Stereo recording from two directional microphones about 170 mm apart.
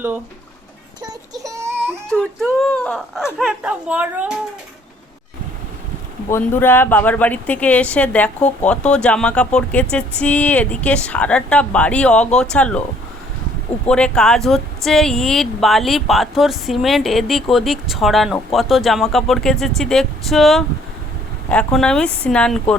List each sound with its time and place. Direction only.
1.5 s baby cry: 15° right (ahead or behind)
2.0 s speech: 5° left (ahead or behind)
6.3 s speech: 15° left (ahead or behind)
13.8 s speech: 5° left (ahead or behind)